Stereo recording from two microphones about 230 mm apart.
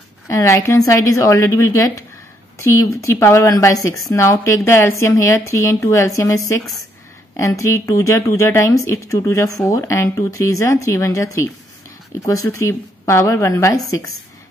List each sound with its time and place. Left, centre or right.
0.3 s a woman's voice: centre